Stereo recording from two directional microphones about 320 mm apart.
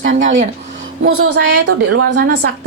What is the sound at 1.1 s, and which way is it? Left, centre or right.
A woman's voice, right.